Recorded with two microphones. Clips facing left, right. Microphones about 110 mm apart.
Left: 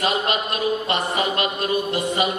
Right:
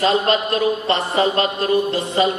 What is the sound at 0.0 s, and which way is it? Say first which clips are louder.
A man's voice: right 5 dB; 30° right (ahead or behind).